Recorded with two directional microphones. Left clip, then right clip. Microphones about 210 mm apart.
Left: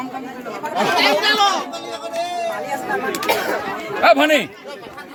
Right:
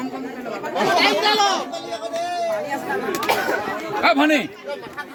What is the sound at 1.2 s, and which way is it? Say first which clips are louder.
Speech: left 2 dB; 50° left (ahead or behind).